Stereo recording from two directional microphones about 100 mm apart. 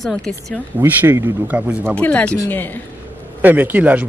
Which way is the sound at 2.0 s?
15° left (ahead or behind).